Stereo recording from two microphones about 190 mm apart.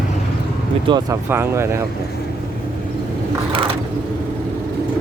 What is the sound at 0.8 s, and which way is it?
Speech, 20° right (ahead or behind).